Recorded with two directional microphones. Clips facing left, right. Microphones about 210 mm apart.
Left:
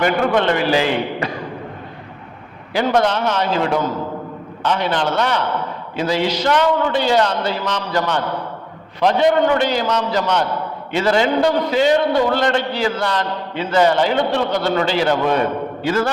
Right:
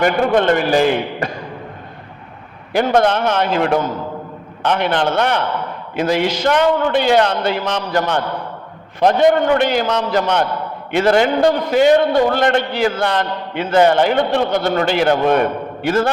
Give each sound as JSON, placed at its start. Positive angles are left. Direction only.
{"t": 0.0, "sound": "a man's voice", "side_deg": -50}
{"t": 2.7, "sound": "a man's voice", "side_deg": -50}